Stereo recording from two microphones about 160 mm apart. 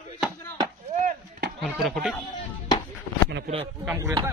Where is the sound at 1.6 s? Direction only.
5° right (ahead or behind).